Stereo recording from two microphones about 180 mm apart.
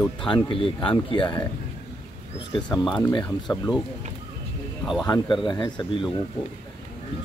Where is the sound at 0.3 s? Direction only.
30° left (ahead or behind).